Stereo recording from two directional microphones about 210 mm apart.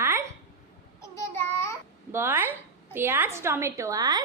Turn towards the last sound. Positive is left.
turn(degrees=-20)  # may be behind; listen again after turning